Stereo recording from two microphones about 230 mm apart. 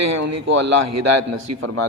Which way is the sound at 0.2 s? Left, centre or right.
Right.